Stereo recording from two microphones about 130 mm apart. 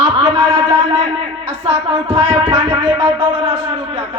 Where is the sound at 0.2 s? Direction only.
40° right (ahead or behind).